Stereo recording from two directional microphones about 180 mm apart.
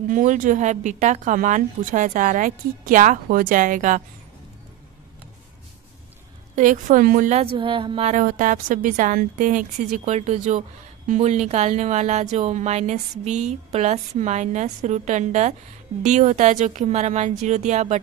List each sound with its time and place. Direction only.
0.1 s a woman's voice: 45° right (ahead or behind)
6.5 s speech: 45° right (ahead or behind); by 8.1 s 30° right (ahead or behind)
8.1 s a woman's voice: 45° right (ahead or behind)